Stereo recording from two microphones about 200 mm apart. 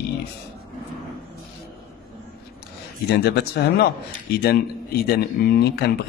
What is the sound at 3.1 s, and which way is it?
Speech, 55° left (ahead or behind).